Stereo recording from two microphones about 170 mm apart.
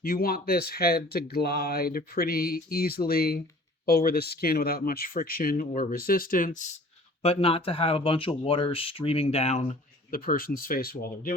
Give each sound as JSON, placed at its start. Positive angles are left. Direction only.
{"t": 0.0, "sound": "speech", "side_deg": 60}
{"t": 7.2, "sound": "speech", "side_deg": 35}
{"t": 10.1, "sound": "speech", "side_deg": 55}